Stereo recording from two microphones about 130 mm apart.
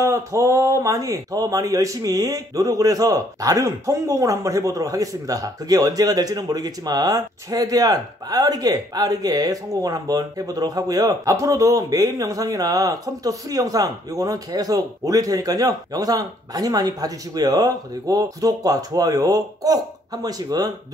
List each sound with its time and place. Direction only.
0.0 s speech: 20° right (ahead or behind)